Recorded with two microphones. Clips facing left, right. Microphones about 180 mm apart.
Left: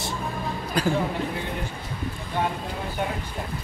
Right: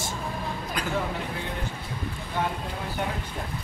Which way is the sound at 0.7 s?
35° left (ahead or behind).